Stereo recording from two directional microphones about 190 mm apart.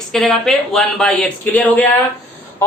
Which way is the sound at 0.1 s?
Centre (ahead or behind).